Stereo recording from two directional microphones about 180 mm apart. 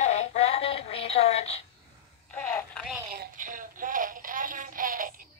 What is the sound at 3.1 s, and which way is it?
Synthetic singing, 50° right (ahead or behind).